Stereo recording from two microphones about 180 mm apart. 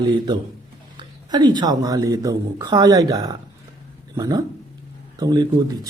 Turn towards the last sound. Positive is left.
turn(degrees=-20)  # may be behind; listen again after turning